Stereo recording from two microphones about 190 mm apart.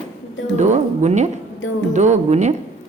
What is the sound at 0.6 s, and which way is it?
A man's voice, 40° right (ahead or behind).